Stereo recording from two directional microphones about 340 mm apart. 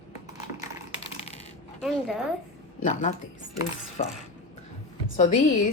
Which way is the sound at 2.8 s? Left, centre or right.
Left.